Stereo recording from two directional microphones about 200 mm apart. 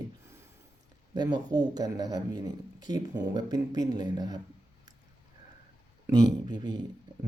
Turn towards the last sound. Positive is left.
turn(degrees=-20)  # may be behind; listen again after turning